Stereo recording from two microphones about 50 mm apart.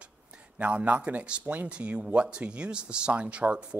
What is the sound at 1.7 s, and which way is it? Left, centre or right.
Speech, right.